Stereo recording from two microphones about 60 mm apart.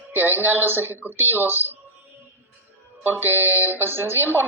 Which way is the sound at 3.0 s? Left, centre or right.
Right.